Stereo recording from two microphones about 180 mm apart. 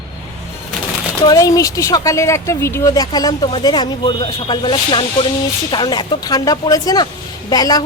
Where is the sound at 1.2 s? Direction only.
20° left (ahead or behind).